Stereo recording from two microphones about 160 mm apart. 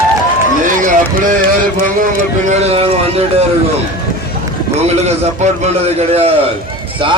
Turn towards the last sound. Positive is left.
turn(degrees=-40)  # may be behind; listen again after turning